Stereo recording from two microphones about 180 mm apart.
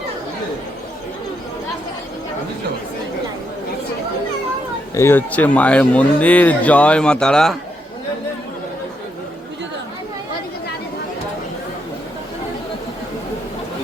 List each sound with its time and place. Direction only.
4.9 s speech: 10° left (ahead or behind)